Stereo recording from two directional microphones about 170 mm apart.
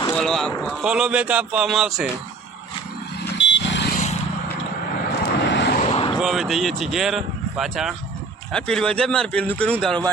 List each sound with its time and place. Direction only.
0.1 s a sound: 5° left (ahead or behind)
0.6 s speech: centre (ahead or behind)
3.3 s vehicle: 90° left
5.2 s vehicle: 90° left
5.8 s vehicle: 35° left (ahead or behind)
6.1 s speech: centre (ahead or behind)